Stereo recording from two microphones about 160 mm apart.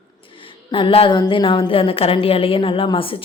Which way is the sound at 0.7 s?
35° left (ahead or behind).